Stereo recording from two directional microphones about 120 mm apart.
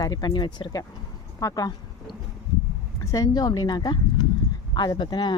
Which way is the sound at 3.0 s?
30° left (ahead or behind).